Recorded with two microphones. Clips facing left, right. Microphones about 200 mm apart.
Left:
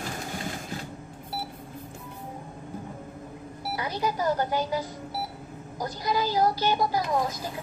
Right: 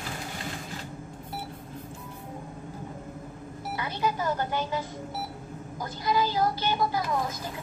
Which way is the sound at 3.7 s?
40° left (ahead or behind).